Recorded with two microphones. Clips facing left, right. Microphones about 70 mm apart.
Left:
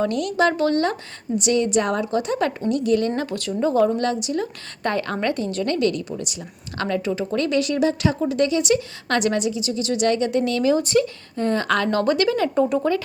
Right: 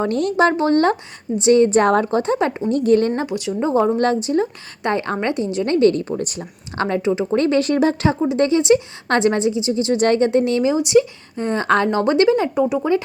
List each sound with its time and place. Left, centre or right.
0.0 s speech: right
2.6 s speech: right
3.2 s speech: centre
3.9 s speech: right
4.8 s speech: right
8.2 s speech: right
12.5 s speech: centre